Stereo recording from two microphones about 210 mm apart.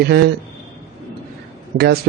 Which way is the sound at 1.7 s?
50° right (ahead or behind).